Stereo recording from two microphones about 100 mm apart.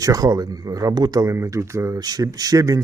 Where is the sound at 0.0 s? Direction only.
35° right (ahead or behind).